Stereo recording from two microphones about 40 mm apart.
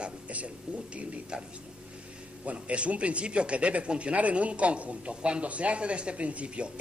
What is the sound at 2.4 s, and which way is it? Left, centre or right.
Speech, right.